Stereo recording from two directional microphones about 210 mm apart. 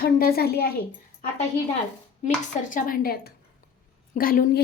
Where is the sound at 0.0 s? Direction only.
45° left (ahead or behind).